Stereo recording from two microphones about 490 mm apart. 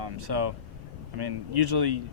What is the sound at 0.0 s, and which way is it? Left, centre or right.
Speech, right.